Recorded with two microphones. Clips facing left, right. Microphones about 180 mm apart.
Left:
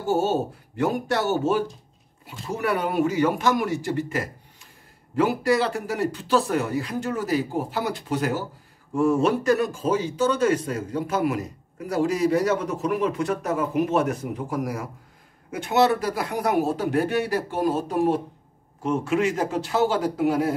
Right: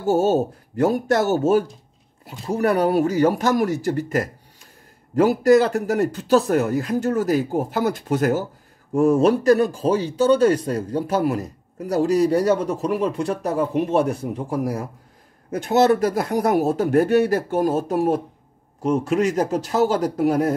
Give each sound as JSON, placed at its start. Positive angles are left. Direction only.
{"t": 0.0, "sound": "a man's voice", "side_deg": -40}